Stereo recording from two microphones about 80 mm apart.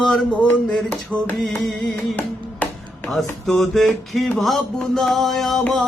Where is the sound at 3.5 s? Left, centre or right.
Centre.